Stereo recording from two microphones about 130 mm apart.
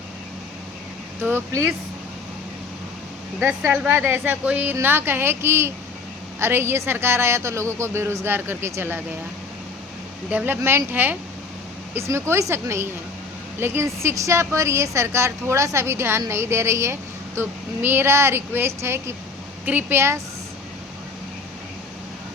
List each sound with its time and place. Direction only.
1.2 s a woman's voice: 20° right (ahead or behind)
3.7 s a woman's voice: 15° right (ahead or behind)
10.3 s a woman's voice: 15° right (ahead or behind)